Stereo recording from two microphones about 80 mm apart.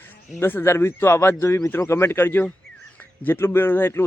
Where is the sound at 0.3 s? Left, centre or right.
Left.